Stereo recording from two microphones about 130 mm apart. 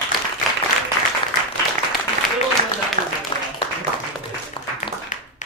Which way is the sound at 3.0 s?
75° right (ahead or behind).